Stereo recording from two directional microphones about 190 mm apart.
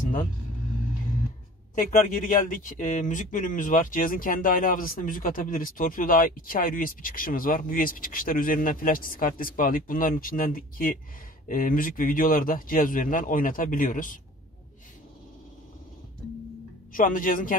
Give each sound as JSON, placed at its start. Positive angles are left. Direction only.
{"t": 1.9, "sound": "speech", "side_deg": 45}
{"t": 16.9, "sound": "speech", "side_deg": 45}